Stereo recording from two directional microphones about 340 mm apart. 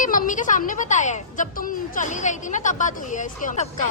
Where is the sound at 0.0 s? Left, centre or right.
Left.